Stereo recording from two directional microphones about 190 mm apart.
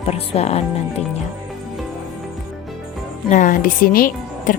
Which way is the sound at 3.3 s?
45° left (ahead or behind).